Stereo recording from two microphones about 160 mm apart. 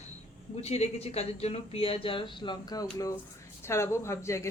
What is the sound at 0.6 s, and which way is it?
A woman's voice, 40° left (ahead or behind).